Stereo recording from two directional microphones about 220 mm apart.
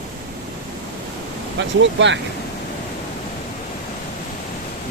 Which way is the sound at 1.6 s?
55° right (ahead or behind).